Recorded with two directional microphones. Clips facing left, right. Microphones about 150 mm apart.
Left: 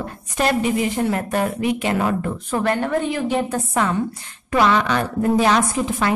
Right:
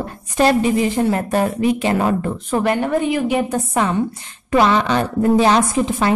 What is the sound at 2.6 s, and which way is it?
A woman's voice, 15° right (ahead or behind).